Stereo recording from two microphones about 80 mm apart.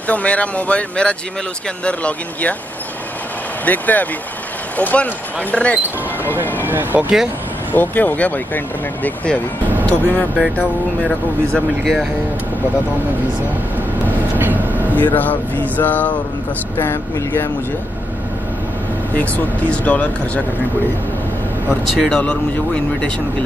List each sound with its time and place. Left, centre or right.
0.0 s speech: centre
3.6 s speech: centre
6.6 s speech: right
7.7 s speech: left
11.1 s speech: centre
14.3 s train: right
15.1 s speech: left
19.1 s speech: centre
21.9 s speech: centre